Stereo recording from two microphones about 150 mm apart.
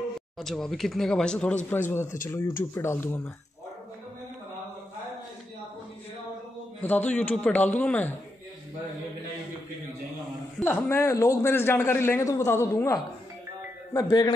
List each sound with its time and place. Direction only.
0.4 s a man's voice: 5° left (ahead or behind)
6.8 s a man's voice: 10° left (ahead or behind)
10.6 s a man's voice: 15° left (ahead or behind)